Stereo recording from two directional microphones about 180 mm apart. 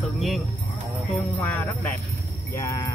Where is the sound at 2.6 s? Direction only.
20° left (ahead or behind).